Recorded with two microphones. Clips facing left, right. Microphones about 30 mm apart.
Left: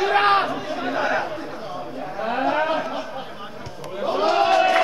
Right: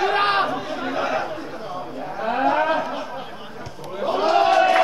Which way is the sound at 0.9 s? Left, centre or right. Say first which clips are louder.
Left 1 dB; left.